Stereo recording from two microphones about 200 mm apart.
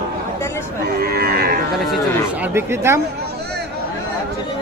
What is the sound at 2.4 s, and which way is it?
Speech, 10° right (ahead or behind).